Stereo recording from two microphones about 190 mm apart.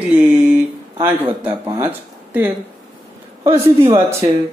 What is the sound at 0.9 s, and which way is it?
Speech, 10° right (ahead or behind).